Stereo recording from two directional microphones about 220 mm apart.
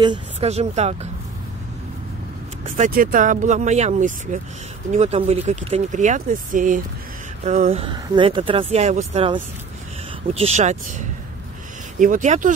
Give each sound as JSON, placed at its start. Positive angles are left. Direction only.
{"t": 0.0, "sound": "speech", "side_deg": -25}
{"t": 2.7, "sound": "speech", "side_deg": -40}
{"t": 12.0, "sound": "speech", "side_deg": -35}